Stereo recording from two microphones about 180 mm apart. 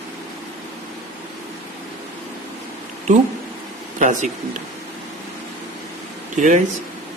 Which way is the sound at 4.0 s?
40° right (ahead or behind).